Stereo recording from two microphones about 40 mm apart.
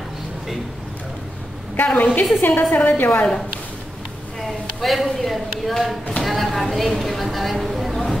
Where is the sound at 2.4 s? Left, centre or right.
Left.